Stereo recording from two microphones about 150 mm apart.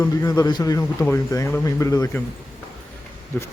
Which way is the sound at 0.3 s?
25° left (ahead or behind).